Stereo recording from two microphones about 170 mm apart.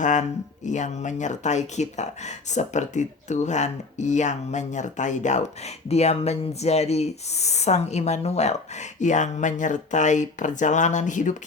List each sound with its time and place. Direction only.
0.0 s speech: 45° left (ahead or behind)